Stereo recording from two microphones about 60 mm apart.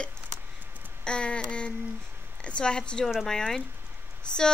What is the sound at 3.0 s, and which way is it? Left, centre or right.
Speech, centre.